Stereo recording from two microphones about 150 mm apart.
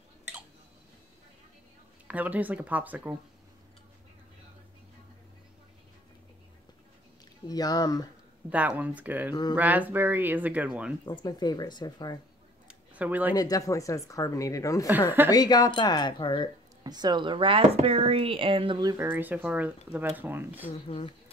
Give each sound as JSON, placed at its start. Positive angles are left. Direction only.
{"t": 2.0, "sound": "speech", "side_deg": -10}
{"t": 7.4, "sound": "speech", "side_deg": 25}
{"t": 8.5, "sound": "speech", "side_deg": -10}
{"t": 9.3, "sound": "speech", "side_deg": 25}
{"t": 9.6, "sound": "speech", "side_deg": -10}
{"t": 11.1, "sound": "speech", "side_deg": 30}
{"t": 12.6, "sound": "a sound", "side_deg": -10}
{"t": 13.3, "sound": "speech", "side_deg": 25}
{"t": 14.9, "sound": "speech", "side_deg": -15}
{"t": 15.3, "sound": "speech", "side_deg": 25}
{"t": 16.8, "sound": "speech", "side_deg": -30}
{"t": 18.9, "sound": "speech", "side_deg": -10}
{"t": 20.8, "sound": "speech", "side_deg": 35}